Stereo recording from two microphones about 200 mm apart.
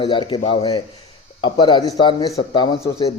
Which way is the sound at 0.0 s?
25° left (ahead or behind).